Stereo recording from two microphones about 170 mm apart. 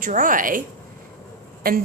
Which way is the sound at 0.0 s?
50° right (ahead or behind).